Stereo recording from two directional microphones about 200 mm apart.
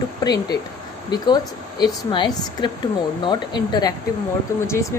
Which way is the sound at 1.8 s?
20° left (ahead or behind).